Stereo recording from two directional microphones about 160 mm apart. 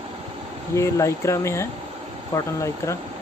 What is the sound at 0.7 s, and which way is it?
Speech, 20° left (ahead or behind).